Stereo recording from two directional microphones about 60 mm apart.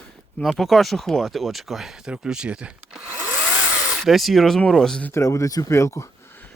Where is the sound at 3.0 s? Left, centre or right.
Right.